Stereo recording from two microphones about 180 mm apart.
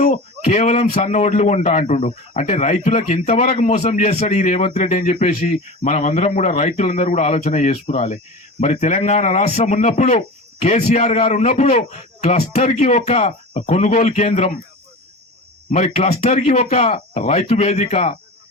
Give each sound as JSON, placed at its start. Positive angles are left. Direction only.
{"t": 0.0, "sound": "speech", "side_deg": 40}
{"t": 15.7, "sound": "speech", "side_deg": 35}